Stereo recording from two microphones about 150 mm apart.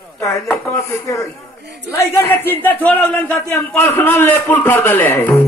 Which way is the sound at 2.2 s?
15° left (ahead or behind).